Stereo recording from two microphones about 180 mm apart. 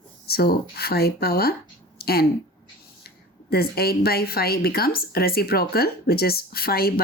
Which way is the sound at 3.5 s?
60° left (ahead or behind).